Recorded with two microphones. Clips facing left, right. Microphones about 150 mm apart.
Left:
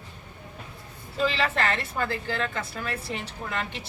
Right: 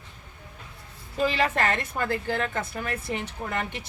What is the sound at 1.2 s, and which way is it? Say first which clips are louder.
Speech: right 1 dB; 10° right (ahead or behind).